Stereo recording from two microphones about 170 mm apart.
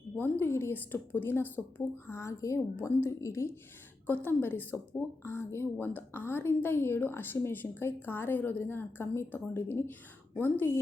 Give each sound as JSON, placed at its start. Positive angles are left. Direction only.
{"t": 0.2, "sound": "a woman's voice", "side_deg": 15}